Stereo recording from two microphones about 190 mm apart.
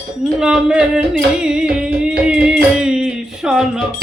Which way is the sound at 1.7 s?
5° right (ahead or behind).